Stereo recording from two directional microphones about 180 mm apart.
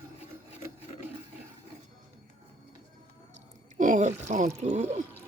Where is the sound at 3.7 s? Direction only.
45° right (ahead or behind).